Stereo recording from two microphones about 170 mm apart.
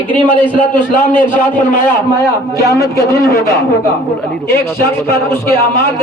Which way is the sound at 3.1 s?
15° left (ahead or behind).